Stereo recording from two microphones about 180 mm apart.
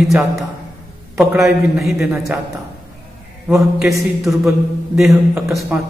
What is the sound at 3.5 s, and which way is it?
Speech, centre (ahead or behind).